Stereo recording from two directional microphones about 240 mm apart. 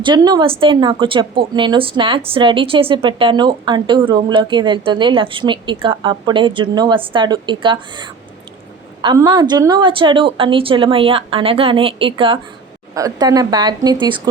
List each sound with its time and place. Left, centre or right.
0.0 s a woman's voice: centre